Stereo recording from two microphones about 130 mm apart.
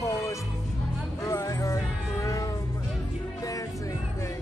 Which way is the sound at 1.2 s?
25° left (ahead or behind).